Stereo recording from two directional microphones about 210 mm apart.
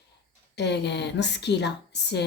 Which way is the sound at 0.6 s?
55° left (ahead or behind).